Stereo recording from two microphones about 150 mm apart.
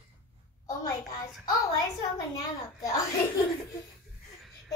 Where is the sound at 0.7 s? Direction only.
20° left (ahead or behind).